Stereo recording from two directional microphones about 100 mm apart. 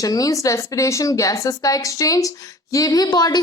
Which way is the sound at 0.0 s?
35° left (ahead or behind).